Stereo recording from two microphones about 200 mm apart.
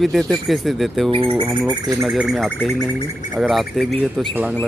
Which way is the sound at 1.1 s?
25° right (ahead or behind).